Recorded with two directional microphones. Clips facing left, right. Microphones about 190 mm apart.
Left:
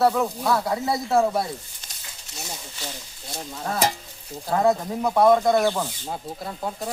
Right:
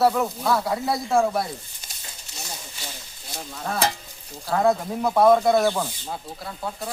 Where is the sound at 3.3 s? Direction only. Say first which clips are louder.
Left 1 dB; 20° left (ahead or behind).